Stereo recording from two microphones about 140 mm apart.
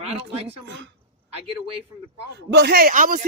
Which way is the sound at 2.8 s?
80° right.